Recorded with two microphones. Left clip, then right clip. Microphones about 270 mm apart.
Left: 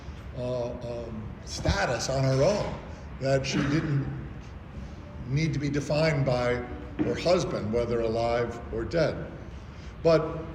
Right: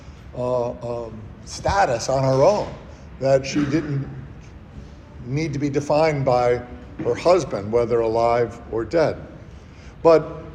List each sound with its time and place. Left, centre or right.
0.3 s a man's voice: centre
5.3 s a man's voice: centre